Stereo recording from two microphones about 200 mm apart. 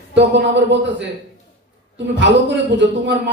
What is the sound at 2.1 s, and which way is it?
A man's voice, 60° right (ahead or behind).